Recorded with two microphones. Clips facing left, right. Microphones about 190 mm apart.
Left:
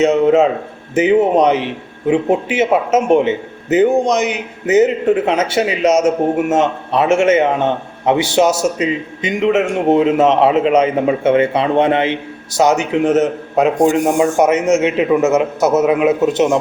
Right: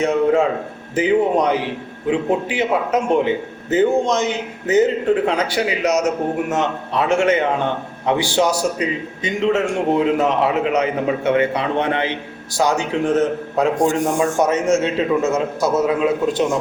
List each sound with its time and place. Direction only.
0.0 s a man's voice: 20° left (ahead or behind)